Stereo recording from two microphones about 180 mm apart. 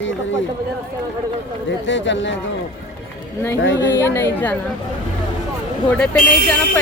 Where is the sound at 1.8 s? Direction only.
90° left.